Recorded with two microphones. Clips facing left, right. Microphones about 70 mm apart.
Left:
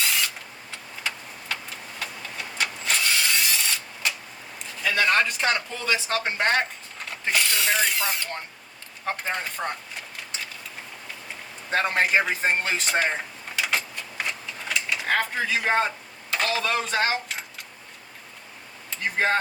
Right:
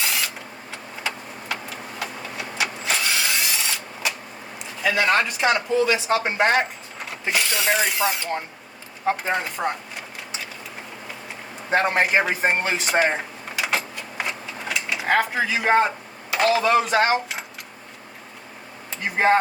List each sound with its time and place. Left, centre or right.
0.0 s a sound: centre
2.0 s vehicle: centre
4.8 s speech: centre
7.3 s speech: centre
11.7 s a man's voice: centre
12.0 s vehicle: centre
15.0 s speech: centre
19.1 s a man's voice: centre